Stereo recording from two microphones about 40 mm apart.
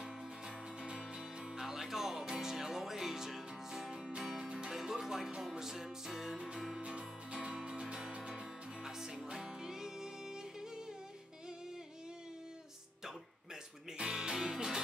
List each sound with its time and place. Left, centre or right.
0.7 s music: centre
3.9 s music: right
6.8 s music: right
13.9 s music: right